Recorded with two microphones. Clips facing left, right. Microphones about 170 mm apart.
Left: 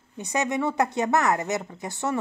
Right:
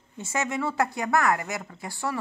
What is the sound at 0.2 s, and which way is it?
Speech, 20° left (ahead or behind).